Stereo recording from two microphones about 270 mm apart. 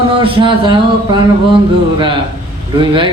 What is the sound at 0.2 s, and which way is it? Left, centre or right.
Speech, centre.